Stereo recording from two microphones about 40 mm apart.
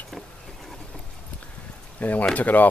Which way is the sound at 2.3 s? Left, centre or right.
Left.